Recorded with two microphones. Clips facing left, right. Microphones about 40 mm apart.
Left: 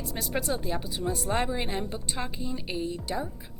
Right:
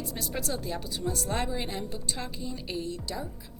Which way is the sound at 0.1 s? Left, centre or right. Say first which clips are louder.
Left 6 dB; left.